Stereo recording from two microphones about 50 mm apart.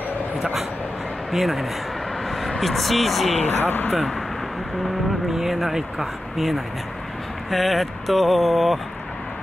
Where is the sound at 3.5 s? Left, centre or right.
Left.